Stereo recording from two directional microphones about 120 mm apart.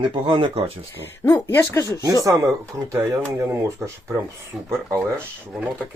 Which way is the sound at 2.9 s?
20° right (ahead or behind).